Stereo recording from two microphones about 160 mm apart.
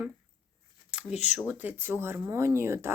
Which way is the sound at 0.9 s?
5° right (ahead or behind).